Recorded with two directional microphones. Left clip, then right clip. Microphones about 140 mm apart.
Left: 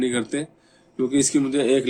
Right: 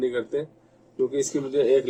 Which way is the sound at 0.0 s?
55° left (ahead or behind).